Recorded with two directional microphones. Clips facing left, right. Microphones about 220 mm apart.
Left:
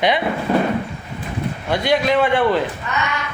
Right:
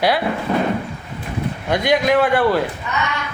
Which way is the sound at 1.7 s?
15° right (ahead or behind).